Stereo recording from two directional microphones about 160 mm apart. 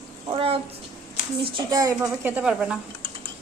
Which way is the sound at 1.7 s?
20° right (ahead or behind).